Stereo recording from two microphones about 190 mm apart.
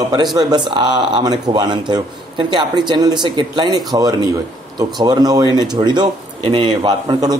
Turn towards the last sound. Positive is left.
turn(degrees=-20)  # may be behind; listen again after turning